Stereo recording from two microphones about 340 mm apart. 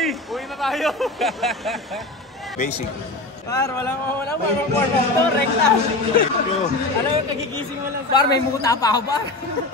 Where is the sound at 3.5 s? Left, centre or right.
Centre.